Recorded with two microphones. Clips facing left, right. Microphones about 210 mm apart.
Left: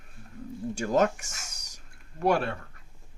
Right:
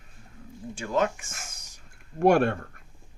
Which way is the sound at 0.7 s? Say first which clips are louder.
Left 2 dB; 40° left (ahead or behind).